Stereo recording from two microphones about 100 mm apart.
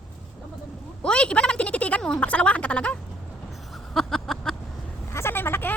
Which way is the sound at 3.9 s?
5° left (ahead or behind).